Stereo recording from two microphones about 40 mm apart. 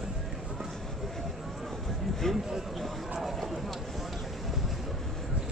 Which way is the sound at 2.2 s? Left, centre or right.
Centre.